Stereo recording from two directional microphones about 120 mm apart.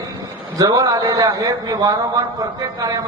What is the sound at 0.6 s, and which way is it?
A man's voice, 30° right (ahead or behind).